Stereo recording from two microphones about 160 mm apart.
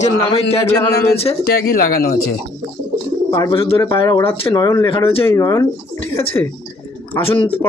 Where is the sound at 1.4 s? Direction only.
75° left (ahead or behind).